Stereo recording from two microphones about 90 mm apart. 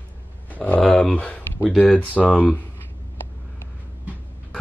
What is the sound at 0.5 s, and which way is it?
Speech, 15° left (ahead or behind).